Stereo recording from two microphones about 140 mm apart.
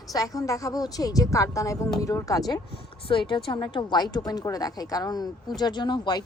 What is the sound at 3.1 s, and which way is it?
A woman's voice, 35° left (ahead or behind).